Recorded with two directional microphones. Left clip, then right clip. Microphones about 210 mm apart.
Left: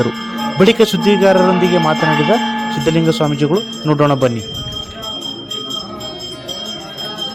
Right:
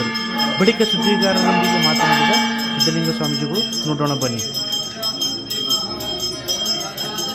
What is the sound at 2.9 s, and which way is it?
A man's voice, 35° left (ahead or behind).